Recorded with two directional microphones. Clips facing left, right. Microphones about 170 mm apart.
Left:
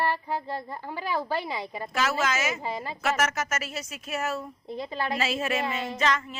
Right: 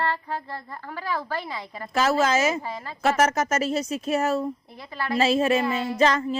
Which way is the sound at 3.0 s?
35° right (ahead or behind).